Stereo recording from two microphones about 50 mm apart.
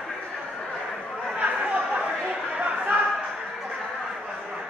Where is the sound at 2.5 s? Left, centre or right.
Right.